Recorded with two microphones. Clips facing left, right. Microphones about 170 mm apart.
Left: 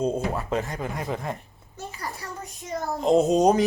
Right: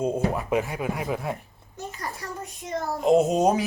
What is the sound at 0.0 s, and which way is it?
Speech, 10° right (ahead or behind).